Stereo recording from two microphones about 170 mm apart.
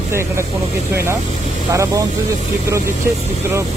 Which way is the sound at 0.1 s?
15° right (ahead or behind).